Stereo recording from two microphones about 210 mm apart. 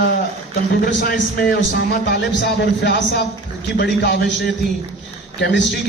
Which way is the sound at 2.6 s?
55° left (ahead or behind).